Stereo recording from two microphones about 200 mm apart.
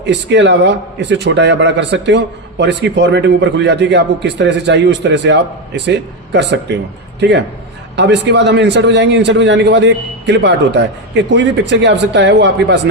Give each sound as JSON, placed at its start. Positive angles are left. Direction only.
{"t": 0.0, "sound": "a man's voice", "side_deg": -60}